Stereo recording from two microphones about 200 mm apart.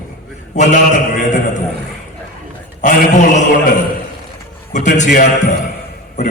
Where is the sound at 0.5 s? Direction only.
40° left (ahead or behind).